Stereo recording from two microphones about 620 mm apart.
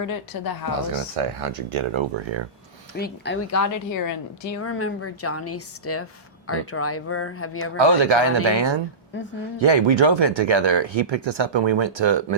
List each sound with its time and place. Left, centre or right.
0.0 s speech: left
0.8 s speech: right
3.0 s a woman's voice: left
7.6 s speech: right